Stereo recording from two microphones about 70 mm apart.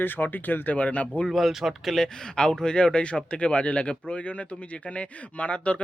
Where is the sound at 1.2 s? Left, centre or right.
Centre.